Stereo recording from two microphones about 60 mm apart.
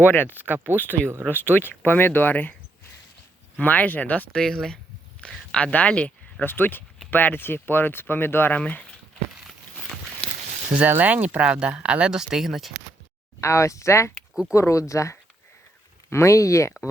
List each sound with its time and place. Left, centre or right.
0.0 s speech: left
0.3 s speech: right
0.8 s speech: left
3.6 s speech: left
4.3 s speech: centre
6.4 s speech: left
8.5 s speech: left
10.8 s speech: right; by 12.7 s centre
13.4 s speech: left